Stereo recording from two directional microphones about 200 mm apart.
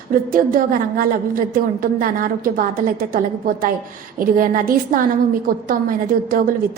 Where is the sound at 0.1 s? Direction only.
45° right (ahead or behind).